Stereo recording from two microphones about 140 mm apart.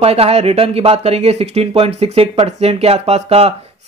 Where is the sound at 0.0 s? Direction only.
45° right (ahead or behind).